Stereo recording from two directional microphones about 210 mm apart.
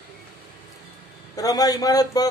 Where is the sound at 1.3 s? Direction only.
15° left (ahead or behind).